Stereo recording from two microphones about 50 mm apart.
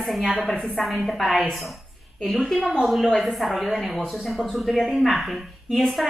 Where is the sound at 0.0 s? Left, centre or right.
Centre.